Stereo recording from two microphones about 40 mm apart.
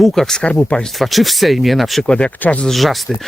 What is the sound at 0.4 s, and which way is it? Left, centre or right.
Speech, left.